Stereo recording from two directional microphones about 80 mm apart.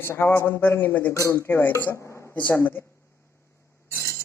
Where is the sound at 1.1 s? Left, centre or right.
Left.